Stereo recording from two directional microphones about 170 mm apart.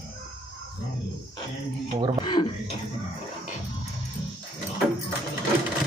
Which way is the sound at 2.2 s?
30° left (ahead or behind).